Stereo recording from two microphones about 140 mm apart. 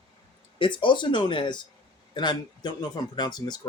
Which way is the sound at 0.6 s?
35° left (ahead or behind).